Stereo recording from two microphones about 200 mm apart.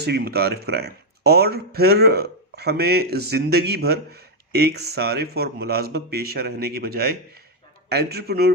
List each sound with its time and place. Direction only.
0.0 s speech: 55° right (ahead or behind)